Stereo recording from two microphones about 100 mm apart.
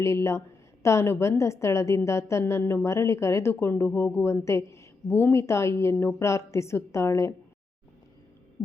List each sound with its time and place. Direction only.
0.0 s a woman's voice: 30° left (ahead or behind)